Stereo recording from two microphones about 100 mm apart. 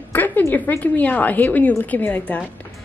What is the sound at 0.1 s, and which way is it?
A woman's voice, 20° left (ahead or behind).